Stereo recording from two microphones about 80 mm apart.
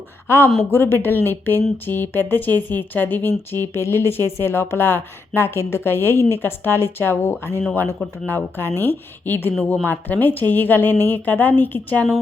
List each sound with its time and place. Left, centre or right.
0.3 s speech: left